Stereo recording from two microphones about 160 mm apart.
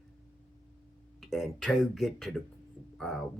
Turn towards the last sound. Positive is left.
turn(degrees=0)  # may be behind; listen again after turning